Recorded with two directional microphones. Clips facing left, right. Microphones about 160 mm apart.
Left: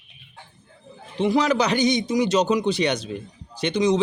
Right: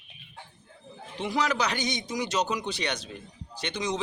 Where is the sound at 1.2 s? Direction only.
25° left (ahead or behind).